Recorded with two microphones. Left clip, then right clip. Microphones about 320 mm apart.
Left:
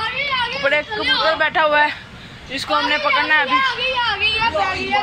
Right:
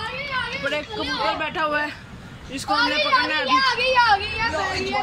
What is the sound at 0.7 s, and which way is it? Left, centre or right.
Speech, centre.